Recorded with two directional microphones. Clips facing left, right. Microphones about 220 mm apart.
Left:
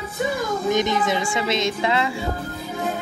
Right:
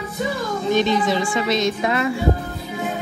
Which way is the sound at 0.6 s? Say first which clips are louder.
Right 3 dB; 20° left (ahead or behind).